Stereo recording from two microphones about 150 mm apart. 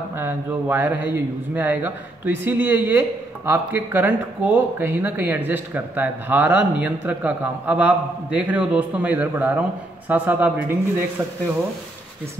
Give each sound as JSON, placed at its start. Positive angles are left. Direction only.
{"t": 0.1, "sound": "speech", "side_deg": -15}